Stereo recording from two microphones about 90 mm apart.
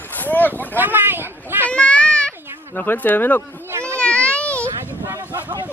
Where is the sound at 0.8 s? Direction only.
20° right (ahead or behind).